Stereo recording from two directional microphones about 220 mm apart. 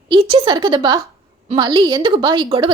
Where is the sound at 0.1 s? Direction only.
25° right (ahead or behind).